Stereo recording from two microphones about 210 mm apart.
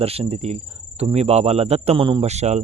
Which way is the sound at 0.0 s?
30° right (ahead or behind).